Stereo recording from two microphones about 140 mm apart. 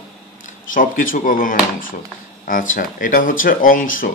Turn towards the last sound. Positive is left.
turn(degrees=75)  # may be behind; listen again after turning